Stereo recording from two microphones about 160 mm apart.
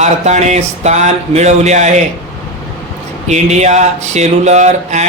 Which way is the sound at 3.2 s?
45° right (ahead or behind).